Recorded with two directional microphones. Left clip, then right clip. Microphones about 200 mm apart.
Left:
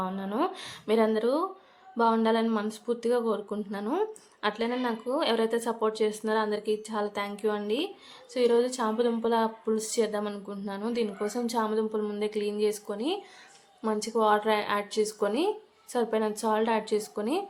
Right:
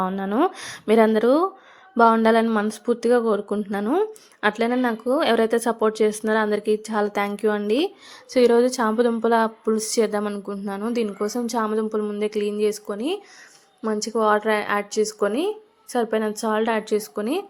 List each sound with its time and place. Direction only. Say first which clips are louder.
0.0 s a woman's voice: right 8 dB; 30° right (ahead or behind)